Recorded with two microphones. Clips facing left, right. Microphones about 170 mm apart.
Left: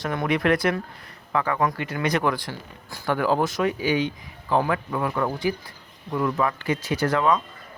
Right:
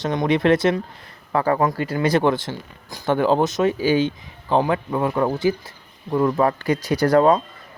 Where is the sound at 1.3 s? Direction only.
35° right (ahead or behind).